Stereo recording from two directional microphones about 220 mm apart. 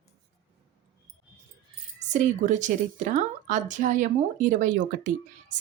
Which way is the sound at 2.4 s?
35° right (ahead or behind).